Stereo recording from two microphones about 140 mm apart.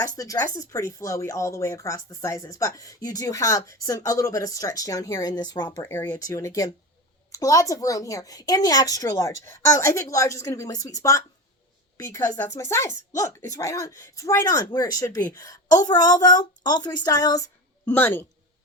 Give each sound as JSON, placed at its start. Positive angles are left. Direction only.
{"t": 0.0, "sound": "speech", "side_deg": 25}
{"t": 5.9, "sound": "speech", "side_deg": 20}
{"t": 17.8, "sound": "speech", "side_deg": 15}